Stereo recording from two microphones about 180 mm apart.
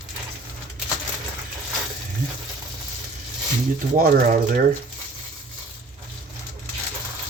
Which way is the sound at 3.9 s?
55° right (ahead or behind).